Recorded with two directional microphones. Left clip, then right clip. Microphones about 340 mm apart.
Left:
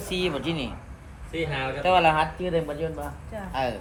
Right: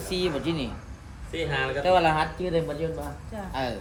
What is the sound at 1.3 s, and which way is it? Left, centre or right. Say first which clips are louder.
Speech: right 1 dB; right.